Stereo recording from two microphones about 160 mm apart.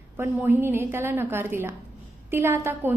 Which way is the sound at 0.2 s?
15° right (ahead or behind).